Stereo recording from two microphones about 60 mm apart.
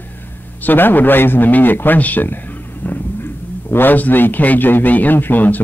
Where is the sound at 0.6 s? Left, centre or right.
Left.